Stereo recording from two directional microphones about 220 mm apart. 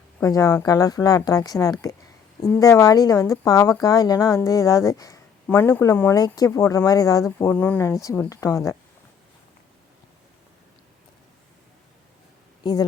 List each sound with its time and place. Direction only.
0.2 s speech: 15° left (ahead or behind)